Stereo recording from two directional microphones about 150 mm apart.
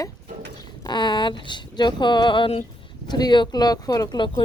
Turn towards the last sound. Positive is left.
turn(degrees=30)  # may be behind; listen again after turning